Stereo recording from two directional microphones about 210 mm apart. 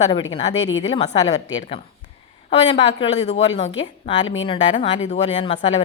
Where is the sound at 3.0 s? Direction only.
30° left (ahead or behind).